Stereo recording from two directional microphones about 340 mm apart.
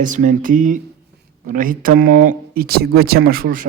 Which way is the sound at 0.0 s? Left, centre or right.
Right.